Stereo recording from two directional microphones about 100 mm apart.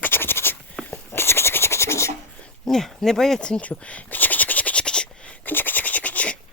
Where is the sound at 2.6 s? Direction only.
5° left (ahead or behind).